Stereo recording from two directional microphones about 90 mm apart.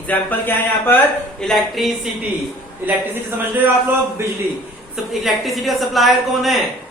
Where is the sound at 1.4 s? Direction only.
Centre (ahead or behind).